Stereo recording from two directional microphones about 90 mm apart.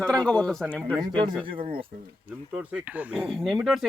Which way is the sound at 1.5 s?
80° right.